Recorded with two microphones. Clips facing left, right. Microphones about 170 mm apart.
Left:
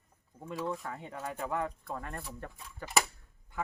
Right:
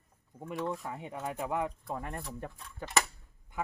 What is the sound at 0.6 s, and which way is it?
Speech, centre (ahead or behind).